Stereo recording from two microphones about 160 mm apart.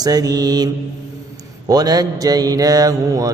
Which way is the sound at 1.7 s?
25° right (ahead or behind).